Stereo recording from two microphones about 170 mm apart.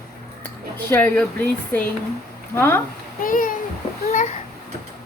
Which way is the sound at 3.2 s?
55° left (ahead or behind).